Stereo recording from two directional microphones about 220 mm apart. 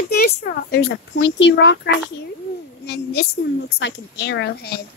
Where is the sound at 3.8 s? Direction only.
50° left (ahead or behind).